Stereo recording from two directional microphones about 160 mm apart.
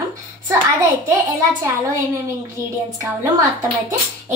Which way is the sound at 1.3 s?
20° right (ahead or behind).